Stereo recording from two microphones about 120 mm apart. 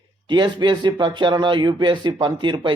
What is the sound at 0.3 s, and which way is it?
A man's voice, 40° right (ahead or behind).